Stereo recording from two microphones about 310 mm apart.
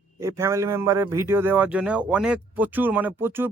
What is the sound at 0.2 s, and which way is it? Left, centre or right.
A man's voice, centre.